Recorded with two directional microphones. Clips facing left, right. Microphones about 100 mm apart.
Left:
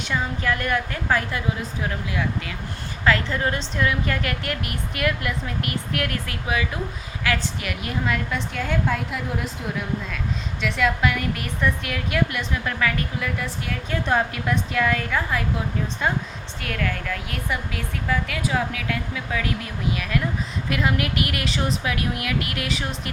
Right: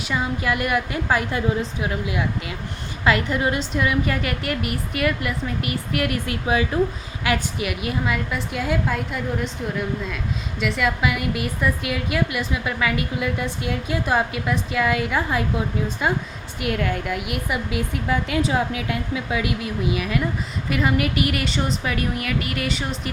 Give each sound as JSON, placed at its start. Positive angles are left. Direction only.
{"t": 0.0, "sound": "a woman's voice", "side_deg": -5}
{"t": 6.2, "sound": "speech", "side_deg": -30}
{"t": 7.3, "sound": "a woman's voice", "side_deg": -10}
{"t": 13.1, "sound": "a woman's voice", "side_deg": -20}
{"t": 16.1, "sound": "a woman's voice", "side_deg": 0}
{"t": 16.6, "sound": "a woman's voice", "side_deg": -20}